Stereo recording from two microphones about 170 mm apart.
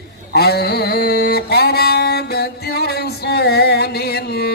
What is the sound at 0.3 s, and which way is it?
Mantra, 70° left (ahead or behind).